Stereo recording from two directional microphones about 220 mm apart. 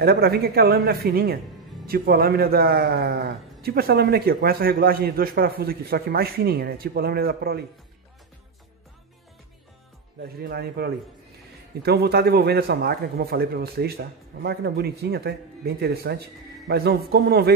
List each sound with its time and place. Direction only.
0.0 s a man's voice: 45° right (ahead or behind)
10.2 s a man's voice: 45° right (ahead or behind)